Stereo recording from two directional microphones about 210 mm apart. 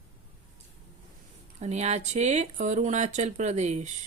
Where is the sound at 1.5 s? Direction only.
35° right (ahead or behind).